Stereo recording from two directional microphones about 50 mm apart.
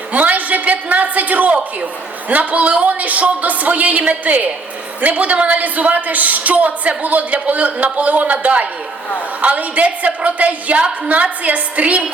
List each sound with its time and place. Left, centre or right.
0.1 s a woman's voice: right